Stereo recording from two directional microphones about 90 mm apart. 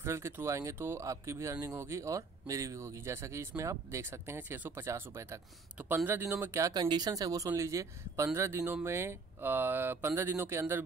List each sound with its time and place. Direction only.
0.0 s speech: 30° right (ahead or behind)
6.7 s speech: 50° right (ahead or behind); by 10.8 s 25° right (ahead or behind)